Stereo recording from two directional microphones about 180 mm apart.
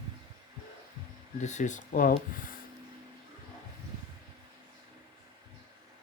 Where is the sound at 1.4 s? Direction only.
40° left (ahead or behind).